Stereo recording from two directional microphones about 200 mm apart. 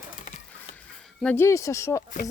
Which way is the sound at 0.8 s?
5° left (ahead or behind).